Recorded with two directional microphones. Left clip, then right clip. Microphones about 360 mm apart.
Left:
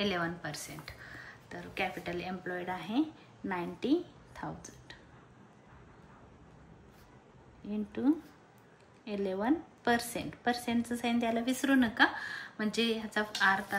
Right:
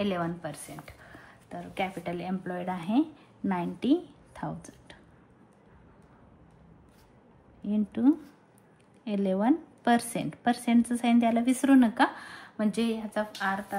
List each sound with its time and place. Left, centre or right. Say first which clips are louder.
0.0 s a woman's voice: right 2 dB; centre
7.7 s a woman's voice: right 6 dB; centre